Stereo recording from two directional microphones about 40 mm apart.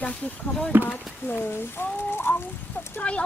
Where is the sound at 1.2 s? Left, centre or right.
Left.